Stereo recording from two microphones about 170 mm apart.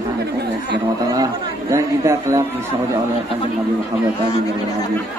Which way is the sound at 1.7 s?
20° right (ahead or behind).